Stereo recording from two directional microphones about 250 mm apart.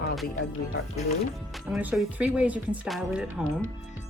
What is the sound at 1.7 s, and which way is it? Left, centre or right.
Speech, centre.